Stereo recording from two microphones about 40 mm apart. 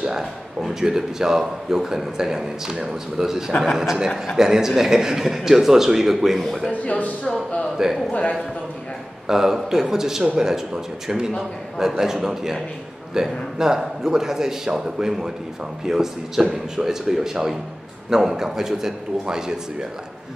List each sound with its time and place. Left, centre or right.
0.2 s a sound: centre
0.7 s a man's voice: centre
6.7 s speech: left
7.7 s a man's voice: centre
8.1 s a man's voice: left
9.3 s a man's voice: centre